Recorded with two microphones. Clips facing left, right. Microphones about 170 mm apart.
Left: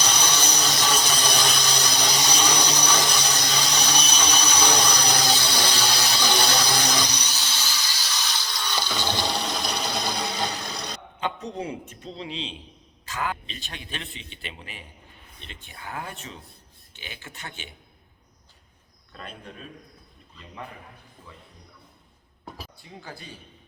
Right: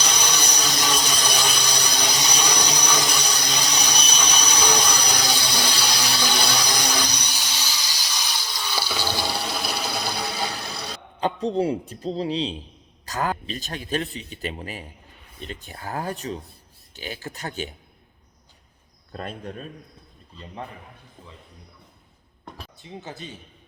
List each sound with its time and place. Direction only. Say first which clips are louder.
0.0 s a sound: even; 10° right (ahead or behind)
8.4 s water: right 1 dB; 10° right (ahead or behind)
11.2 s a man's voice: right 8 dB; 30° right (ahead or behind)
19.1 s a man's voice: right 7 dB; 45° right (ahead or behind)
22.5 s a sound: even; 5° left (ahead or behind)
22.8 s speech: right 9 dB; 20° right (ahead or behind)